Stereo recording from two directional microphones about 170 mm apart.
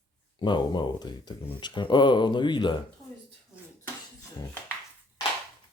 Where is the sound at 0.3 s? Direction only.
25° left (ahead or behind).